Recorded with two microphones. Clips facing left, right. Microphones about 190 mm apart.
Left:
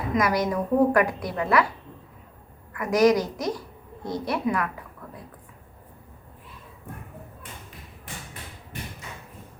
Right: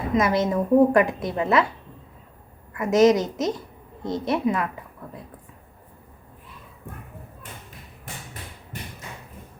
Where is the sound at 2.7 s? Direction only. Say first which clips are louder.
Right 2 dB; 25° right (ahead or behind).